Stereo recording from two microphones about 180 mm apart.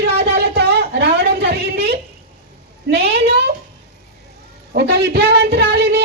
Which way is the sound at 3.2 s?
65° right (ahead or behind).